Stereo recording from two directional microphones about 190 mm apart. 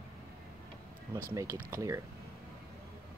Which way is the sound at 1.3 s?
15° right (ahead or behind).